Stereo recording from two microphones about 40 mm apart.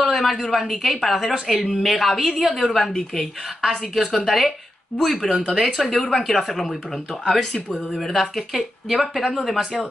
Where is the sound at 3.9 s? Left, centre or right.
Centre.